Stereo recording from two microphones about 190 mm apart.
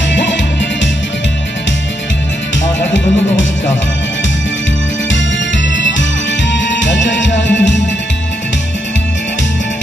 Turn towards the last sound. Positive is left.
turn(degrees=70)  # may be behind; listen again after turning